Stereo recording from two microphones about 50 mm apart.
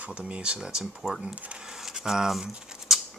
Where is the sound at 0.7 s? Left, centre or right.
Centre.